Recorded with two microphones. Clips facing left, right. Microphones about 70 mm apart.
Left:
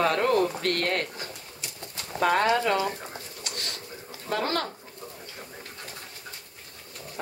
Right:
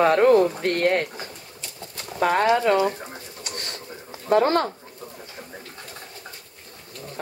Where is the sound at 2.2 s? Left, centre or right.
Centre.